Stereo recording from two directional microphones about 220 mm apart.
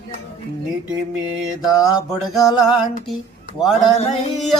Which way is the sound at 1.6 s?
15° left (ahead or behind).